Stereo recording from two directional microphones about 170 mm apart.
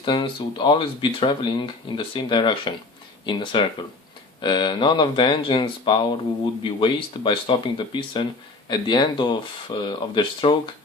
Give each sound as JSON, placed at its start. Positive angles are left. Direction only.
{"t": 0.0, "sound": "speech", "side_deg": 30}